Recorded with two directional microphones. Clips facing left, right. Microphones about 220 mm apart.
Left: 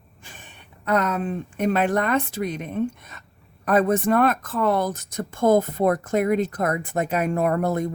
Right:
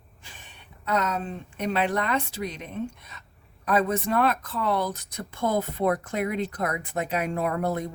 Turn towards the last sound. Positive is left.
turn(degrees=50)  # may be behind; listen again after turning